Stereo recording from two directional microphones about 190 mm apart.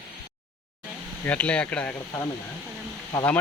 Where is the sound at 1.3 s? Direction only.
5° left (ahead or behind).